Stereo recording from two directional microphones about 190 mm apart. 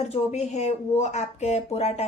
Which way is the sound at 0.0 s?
35° left (ahead or behind).